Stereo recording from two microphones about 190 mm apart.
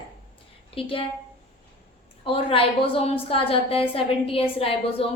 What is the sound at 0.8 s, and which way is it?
Speech, 30° left (ahead or behind).